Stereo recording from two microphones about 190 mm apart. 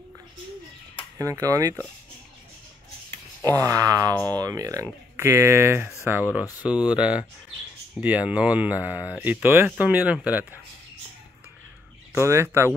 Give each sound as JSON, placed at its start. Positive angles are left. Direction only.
{"t": 1.1, "sound": "speech", "side_deg": -15}
{"t": 3.4, "sound": "speech", "side_deg": -15}
{"t": 12.1, "sound": "speech", "side_deg": -15}